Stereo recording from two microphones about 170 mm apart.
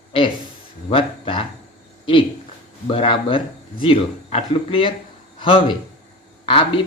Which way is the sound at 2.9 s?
30° left (ahead or behind).